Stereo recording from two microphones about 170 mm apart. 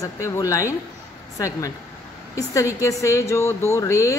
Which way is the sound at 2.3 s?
20° left (ahead or behind).